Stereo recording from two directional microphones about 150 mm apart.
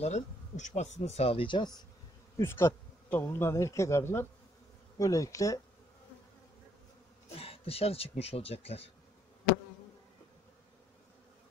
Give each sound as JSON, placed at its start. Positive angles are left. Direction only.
{"t": 0.0, "sound": "speech", "side_deg": 50}
{"t": 2.3, "sound": "speech", "side_deg": 15}
{"t": 7.2, "sound": "speech", "side_deg": 40}